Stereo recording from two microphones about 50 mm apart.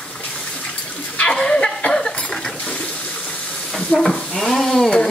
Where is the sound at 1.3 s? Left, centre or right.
Centre.